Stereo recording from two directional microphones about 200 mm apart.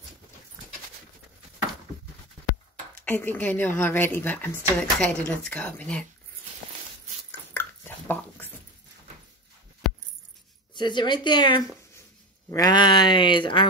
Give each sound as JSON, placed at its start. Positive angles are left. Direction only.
{"t": 3.1, "sound": "speech", "side_deg": 10}
{"t": 7.2, "sound": "dog", "side_deg": 10}
{"t": 10.7, "sound": "speech", "side_deg": 20}